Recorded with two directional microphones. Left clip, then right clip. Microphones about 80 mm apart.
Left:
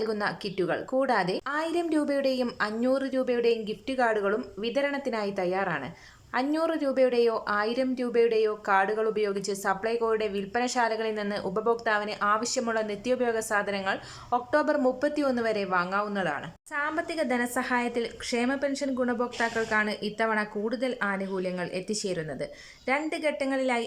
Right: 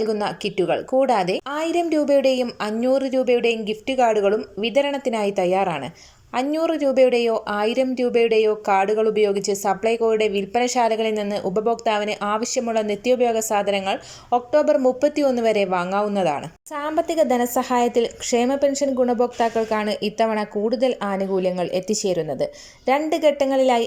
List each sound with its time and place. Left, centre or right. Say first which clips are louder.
0.0 s speech: right 7 dB; right
6.5 s speech: right 8 dB; right
16.7 s speech: right 8 dB; right